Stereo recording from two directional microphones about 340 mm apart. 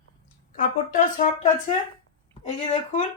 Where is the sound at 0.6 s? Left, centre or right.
Left.